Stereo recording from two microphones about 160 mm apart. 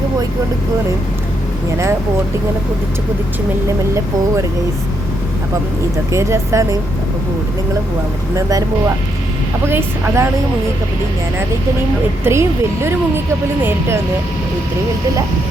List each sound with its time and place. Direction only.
6.1 s speech: 15° right (ahead or behind)
8.4 s speech: 20° right (ahead or behind)
9.6 s speech: 15° right (ahead or behind)
12.2 s speech: 15° right (ahead or behind)